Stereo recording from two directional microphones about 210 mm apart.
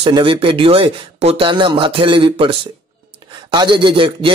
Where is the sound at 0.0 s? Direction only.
25° right (ahead or behind).